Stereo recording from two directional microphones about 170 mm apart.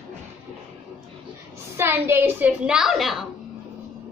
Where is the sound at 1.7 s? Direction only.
10° right (ahead or behind).